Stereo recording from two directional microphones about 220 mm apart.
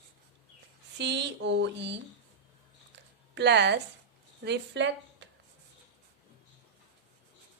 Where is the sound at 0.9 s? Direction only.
50° right (ahead or behind).